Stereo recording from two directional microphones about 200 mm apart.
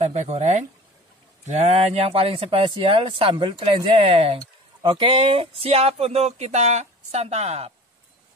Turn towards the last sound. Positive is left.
turn(degrees=-30)  # may be behind; listen again after turning